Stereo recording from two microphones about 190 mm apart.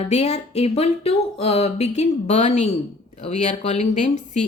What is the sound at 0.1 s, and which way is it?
Speech, 35° left (ahead or behind).